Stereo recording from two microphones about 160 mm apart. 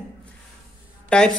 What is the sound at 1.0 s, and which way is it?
Speech, 5° left (ahead or behind).